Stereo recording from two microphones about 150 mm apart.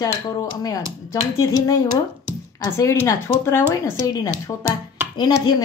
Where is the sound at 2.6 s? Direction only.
20° left (ahead or behind).